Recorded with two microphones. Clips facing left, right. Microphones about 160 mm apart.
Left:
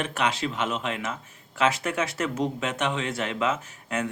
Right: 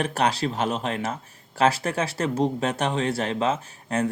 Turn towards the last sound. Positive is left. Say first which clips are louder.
# right 4 dB
turn(degrees=-35)  # may be behind; listen again after turning